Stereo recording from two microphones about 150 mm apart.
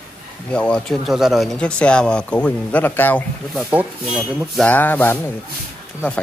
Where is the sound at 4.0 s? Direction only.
Centre (ahead or behind).